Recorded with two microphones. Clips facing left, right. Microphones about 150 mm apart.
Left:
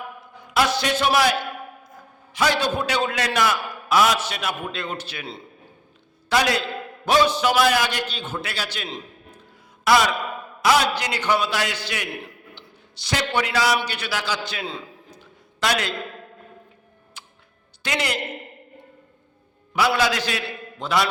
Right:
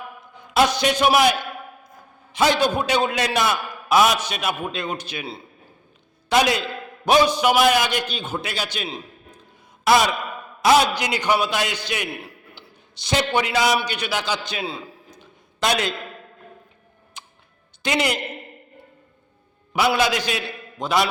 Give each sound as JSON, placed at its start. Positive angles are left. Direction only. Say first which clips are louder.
{"t": 0.3, "sound": "a man's voice", "louder": "right 3 dB", "side_deg": -20}
{"t": 6.2, "sound": "a man's voice", "louder": "right 2 dB", "side_deg": -20}
{"t": 15.1, "sound": "a sound", "louder": "left 1 dB", "side_deg": -20}
{"t": 17.2, "sound": "tick-tock", "louder": "right 3 dB", "side_deg": -20}
{"t": 17.8, "sound": "a man's voice", "louder": "right 4 dB", "side_deg": -20}
{"t": 20.0, "sound": "a man's voice", "louder": "right 1 dB", "side_deg": -15}